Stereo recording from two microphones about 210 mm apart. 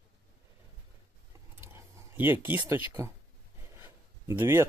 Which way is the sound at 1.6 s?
10° right (ahead or behind).